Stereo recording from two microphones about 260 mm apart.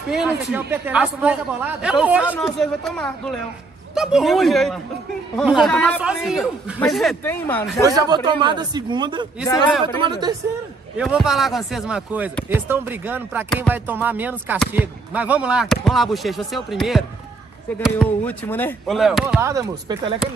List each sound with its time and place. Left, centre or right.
0.1 s speech: centre
7.8 s a man's voice: centre
11.0 s speech: centre
19.4 s a man's voice: centre